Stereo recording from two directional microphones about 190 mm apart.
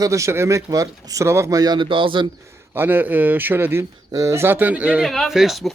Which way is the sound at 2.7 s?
10° right (ahead or behind).